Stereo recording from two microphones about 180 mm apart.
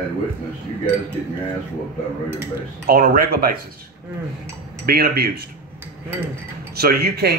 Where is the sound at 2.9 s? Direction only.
55° right (ahead or behind).